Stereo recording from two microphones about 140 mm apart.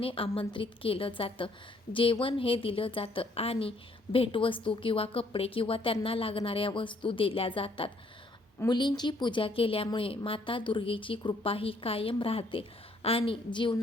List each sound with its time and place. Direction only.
0.0 s a woman's voice: 40° left (ahead or behind)